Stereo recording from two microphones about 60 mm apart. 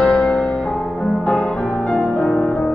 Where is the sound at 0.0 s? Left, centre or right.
Centre.